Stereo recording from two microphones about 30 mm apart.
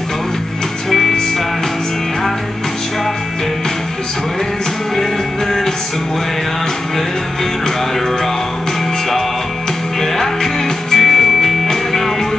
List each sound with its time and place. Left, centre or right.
0.8 s music: centre
10.1 s music: centre